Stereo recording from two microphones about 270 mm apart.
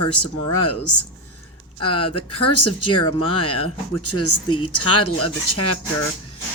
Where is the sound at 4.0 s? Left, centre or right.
Left.